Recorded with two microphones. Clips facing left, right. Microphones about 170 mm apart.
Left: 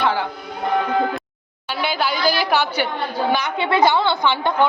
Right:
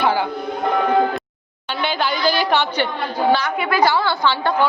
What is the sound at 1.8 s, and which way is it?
A woman's voice, 10° left (ahead or behind).